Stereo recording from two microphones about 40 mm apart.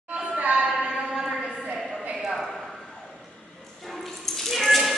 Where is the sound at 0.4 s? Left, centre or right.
Right.